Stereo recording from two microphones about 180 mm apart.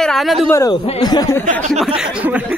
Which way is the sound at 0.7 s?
25° left (ahead or behind).